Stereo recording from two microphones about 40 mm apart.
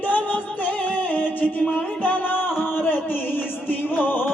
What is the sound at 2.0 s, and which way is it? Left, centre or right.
Music, left.